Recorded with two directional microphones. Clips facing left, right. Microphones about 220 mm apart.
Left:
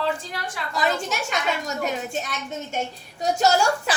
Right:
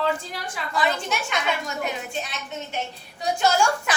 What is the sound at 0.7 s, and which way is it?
A woman's voice, 40° left (ahead or behind).